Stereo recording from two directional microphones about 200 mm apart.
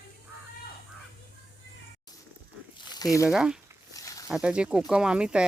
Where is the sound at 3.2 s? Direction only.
5° right (ahead or behind).